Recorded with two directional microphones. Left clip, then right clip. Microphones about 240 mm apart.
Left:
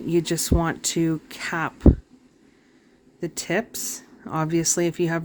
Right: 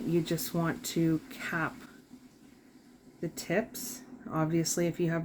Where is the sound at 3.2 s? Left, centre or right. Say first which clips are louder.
Left 6 dB; left.